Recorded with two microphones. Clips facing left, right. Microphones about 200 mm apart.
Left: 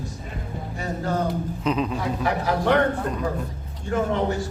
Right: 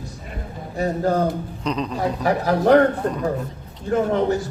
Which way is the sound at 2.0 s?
40° right (ahead or behind).